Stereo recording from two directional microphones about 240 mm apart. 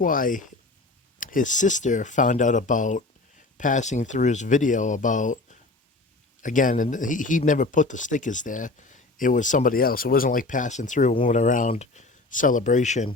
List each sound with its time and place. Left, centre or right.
0.0 s speech: left